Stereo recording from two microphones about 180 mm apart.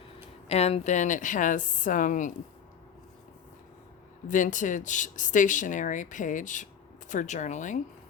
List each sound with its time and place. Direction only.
0.4 s speech: 35° left (ahead or behind)
4.3 s speech: 45° left (ahead or behind)